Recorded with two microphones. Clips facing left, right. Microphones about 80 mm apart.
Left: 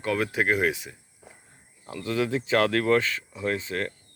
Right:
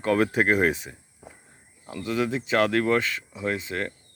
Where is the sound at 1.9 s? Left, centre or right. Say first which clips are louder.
Even; centre.